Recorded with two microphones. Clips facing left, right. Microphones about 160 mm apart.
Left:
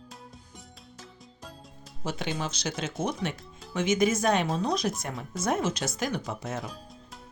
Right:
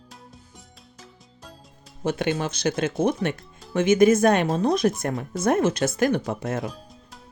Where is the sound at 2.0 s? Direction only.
55° right (ahead or behind).